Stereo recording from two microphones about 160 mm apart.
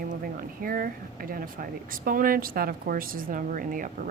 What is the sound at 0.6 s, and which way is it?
Speech, 65° right (ahead or behind).